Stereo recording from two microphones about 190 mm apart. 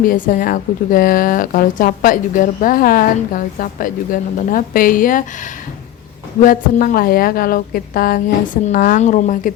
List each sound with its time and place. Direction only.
0.0 s speech: 45° left (ahead or behind)
6.4 s speech: 45° left (ahead or behind)